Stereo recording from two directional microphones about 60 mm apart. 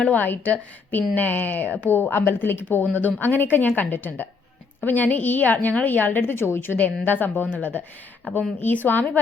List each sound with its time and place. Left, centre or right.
0.0 s a woman's voice: left
6.7 s a woman's voice: left